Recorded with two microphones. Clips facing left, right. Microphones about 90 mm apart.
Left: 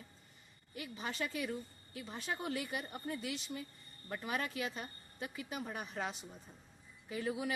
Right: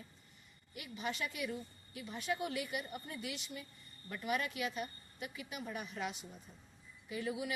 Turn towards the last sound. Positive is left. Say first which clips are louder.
# left 1 dB
turn(degrees=35)  # may be behind; listen again after turning